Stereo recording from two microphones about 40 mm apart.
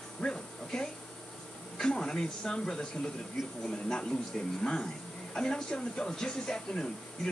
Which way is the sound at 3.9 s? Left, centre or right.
Centre.